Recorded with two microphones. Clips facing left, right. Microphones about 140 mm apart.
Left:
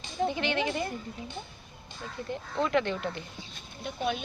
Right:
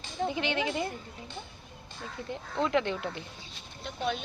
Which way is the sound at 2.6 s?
15° right (ahead or behind).